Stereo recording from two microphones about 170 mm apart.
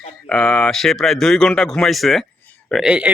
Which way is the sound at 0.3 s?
5° left (ahead or behind).